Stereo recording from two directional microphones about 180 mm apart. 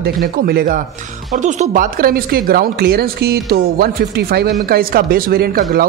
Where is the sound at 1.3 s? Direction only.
45° right (ahead or behind).